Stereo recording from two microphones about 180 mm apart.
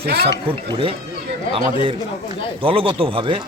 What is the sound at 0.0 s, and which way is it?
Speech, 60° right (ahead or behind).